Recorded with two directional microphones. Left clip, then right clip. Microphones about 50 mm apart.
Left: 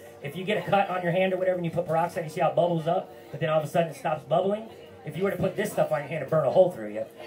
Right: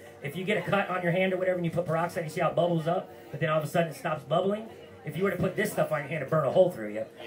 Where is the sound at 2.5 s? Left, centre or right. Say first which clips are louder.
Left 2 dB; right.